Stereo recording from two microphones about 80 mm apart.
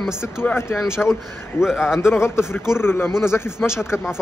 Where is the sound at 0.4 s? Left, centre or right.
Left.